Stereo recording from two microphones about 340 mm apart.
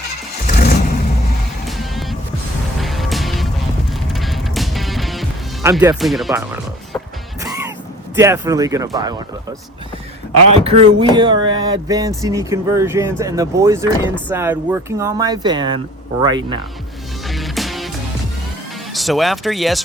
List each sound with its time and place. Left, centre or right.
0.4 s vehicle: left
1.6 s music: centre
5.6 s speech: centre
7.4 s music: centre
8.1 s a sound: centre
17.2 s music: centre
18.9 s speech: centre